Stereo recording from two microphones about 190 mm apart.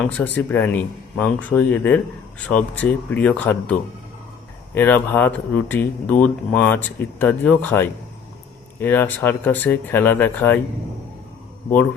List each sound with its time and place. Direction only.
0.0 s speech: 10° left (ahead or behind)